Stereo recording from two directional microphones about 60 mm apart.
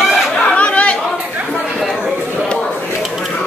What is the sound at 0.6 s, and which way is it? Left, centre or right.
Chatter, centre.